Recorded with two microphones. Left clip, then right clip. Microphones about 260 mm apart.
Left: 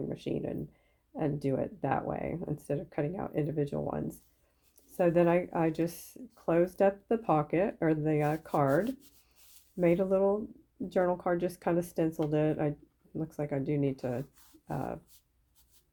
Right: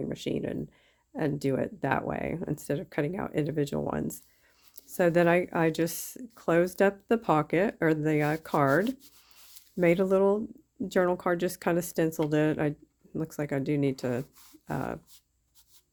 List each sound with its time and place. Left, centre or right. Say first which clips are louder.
0.0 s speech: right 3 dB; right